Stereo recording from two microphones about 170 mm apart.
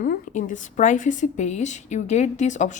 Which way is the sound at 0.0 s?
50° left (ahead or behind).